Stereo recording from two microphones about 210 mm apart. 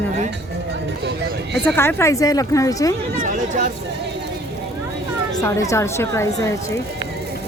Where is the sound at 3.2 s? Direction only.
40° right (ahead or behind).